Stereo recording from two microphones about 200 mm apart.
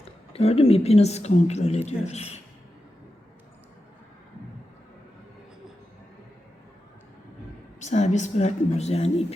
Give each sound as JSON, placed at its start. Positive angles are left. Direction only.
{"t": 0.0, "sound": "a woman's voice", "side_deg": 30}
{"t": 7.8, "sound": "a woman's voice", "side_deg": 35}